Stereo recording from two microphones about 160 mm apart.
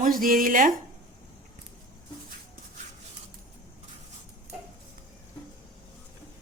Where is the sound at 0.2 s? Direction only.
60° right (ahead or behind).